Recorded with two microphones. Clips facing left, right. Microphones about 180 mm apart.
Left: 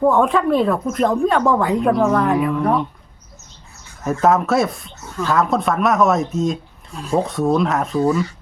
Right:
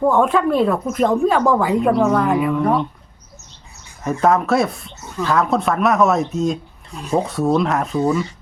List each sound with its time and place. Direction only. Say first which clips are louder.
0.0 s speech: even; centre (ahead or behind)
4.0 s speech: even; centre (ahead or behind)